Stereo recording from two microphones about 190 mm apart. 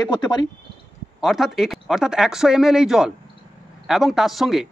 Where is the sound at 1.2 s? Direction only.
Centre (ahead or behind).